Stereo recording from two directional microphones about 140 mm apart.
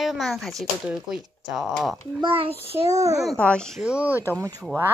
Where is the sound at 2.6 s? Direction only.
45° right (ahead or behind).